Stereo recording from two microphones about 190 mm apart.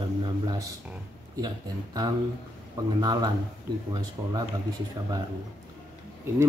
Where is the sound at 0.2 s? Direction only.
20° right (ahead or behind).